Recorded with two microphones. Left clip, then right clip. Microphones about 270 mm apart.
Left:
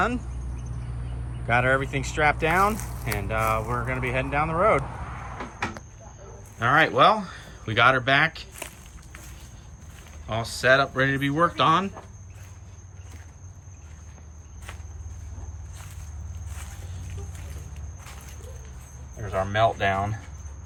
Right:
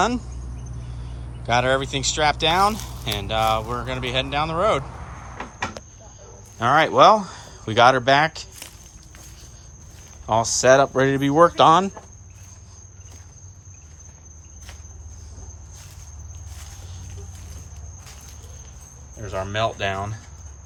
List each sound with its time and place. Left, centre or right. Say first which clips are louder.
1.5 s speech: right 2 dB; centre
5.0 s vehicle: left 2 dB; left
6.6 s speech: right 4 dB; centre
10.2 s speech: right 5 dB; centre
19.2 s speech: left 2 dB; centre